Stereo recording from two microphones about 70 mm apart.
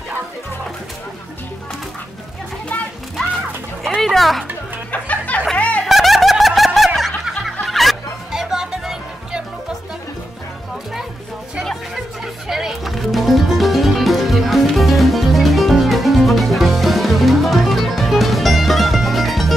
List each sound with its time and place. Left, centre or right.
3.8 s a sound: centre
4.9 s music: left
5.9 s snicker: centre
7.6 s music: centre
11.6 s music: centre